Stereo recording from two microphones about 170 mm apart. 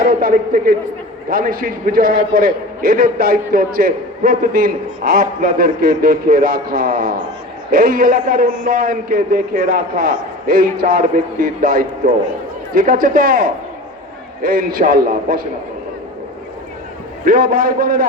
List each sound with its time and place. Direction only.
0.0 s a man's voice: 60° right (ahead or behind)
17.2 s a man's voice: 55° right (ahead or behind)